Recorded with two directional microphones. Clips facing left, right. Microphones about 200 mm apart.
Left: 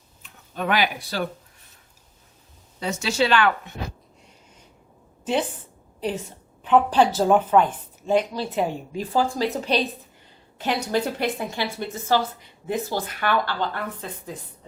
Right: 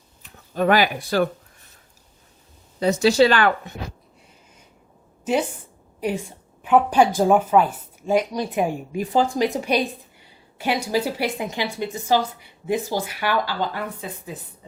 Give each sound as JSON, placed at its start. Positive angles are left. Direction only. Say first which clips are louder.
{"t": 0.5, "sound": "speech", "louder": "right 5 dB", "side_deg": -40}
{"t": 2.8, "sound": "speech", "louder": "right 8 dB", "side_deg": -35}
{"t": 5.2, "sound": "a woman's voice", "louder": "right 2 dB", "side_deg": -10}